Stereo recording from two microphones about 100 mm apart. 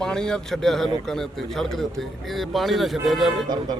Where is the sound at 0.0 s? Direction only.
5° left (ahead or behind).